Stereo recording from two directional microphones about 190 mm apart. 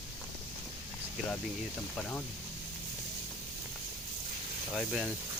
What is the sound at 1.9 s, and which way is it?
Speech, 5° left (ahead or behind).